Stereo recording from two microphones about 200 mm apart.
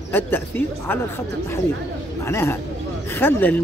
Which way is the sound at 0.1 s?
10° left (ahead or behind).